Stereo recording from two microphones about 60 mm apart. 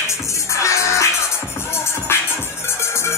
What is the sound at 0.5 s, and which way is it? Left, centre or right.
Music, left.